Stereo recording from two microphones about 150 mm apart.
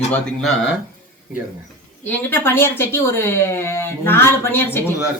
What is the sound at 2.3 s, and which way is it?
A woman's voice, 15° left (ahead or behind).